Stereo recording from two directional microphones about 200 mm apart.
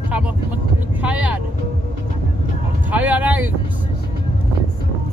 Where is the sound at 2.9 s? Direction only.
10° right (ahead or behind).